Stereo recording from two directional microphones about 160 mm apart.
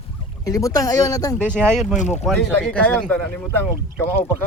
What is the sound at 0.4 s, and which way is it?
Speech, 20° left (ahead or behind).